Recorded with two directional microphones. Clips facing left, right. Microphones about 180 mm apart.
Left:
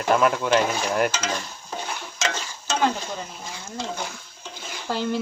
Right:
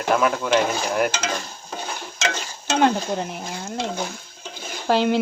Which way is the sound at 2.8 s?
60° right (ahead or behind).